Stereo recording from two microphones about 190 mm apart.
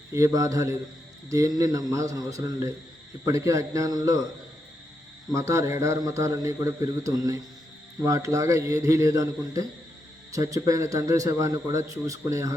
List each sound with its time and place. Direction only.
0.1 s a man's voice: 15° right (ahead or behind)
5.3 s a man's voice: 15° right (ahead or behind)